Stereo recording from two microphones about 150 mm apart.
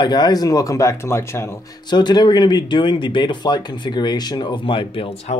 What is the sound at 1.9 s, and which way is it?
Speech, 30° left (ahead or behind).